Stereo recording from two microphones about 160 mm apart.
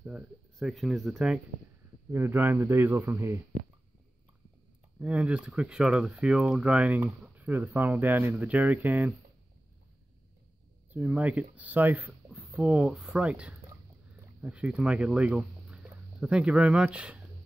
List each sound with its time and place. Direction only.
0.0 s speech: 5° right (ahead or behind)
2.1 s speech: 15° right (ahead or behind)
5.0 s speech: 10° right (ahead or behind)
10.9 s speech: 10° right (ahead or behind)